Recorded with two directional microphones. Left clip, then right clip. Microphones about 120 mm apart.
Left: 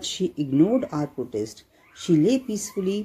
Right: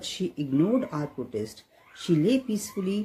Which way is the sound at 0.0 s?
30° left (ahead or behind).